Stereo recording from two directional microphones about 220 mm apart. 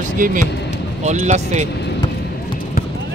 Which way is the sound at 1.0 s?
30° right (ahead or behind).